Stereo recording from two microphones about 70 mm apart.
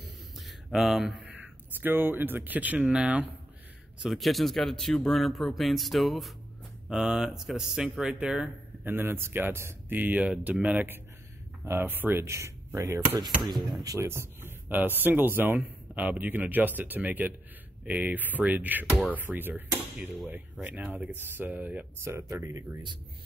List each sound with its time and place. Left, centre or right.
0.0 s a sound: centre
1.2 s speech: right
4.0 s speech: centre
6.9 s speech: centre
8.8 s speech: right
9.9 s speech: right
11.6 s speech: right
13.5 s speech: right
13.9 s speech: right
22.3 s speech: right